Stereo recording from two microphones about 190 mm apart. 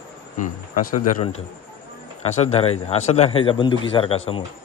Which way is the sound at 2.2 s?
35° left (ahead or behind).